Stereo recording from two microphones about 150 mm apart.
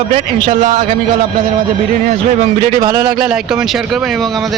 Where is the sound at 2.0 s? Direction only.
55° right (ahead or behind).